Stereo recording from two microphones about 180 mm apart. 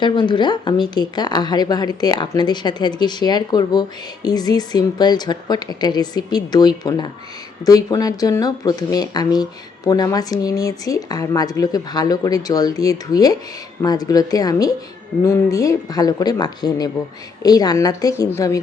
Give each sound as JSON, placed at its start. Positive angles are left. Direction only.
{"t": 0.0, "sound": "speech", "side_deg": 25}